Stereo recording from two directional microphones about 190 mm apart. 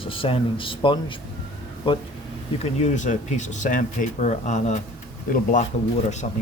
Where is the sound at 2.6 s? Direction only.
40° left (ahead or behind).